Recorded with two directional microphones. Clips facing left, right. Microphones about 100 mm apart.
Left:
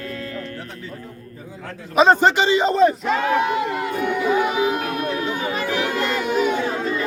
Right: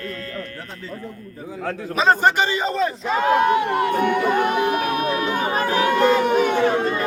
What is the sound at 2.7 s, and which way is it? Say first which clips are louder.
Speech: left 6 dB; 25° left (ahead or behind).